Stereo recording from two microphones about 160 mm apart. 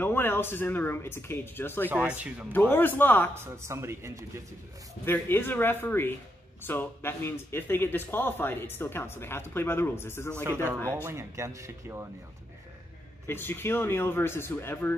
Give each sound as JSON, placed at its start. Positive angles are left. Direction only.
{"t": 0.0, "sound": "speech", "side_deg": 15}
{"t": 1.9, "sound": "speech", "side_deg": -10}
{"t": 2.5, "sound": "speech", "side_deg": 10}
{"t": 3.6, "sound": "speech", "side_deg": -15}
{"t": 5.0, "sound": "speech", "side_deg": 15}
{"t": 11.1, "sound": "speech", "side_deg": -15}
{"t": 13.3, "sound": "speech", "side_deg": 15}